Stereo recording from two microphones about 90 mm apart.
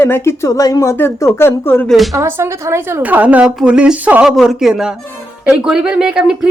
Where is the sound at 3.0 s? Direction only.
20° right (ahead or behind).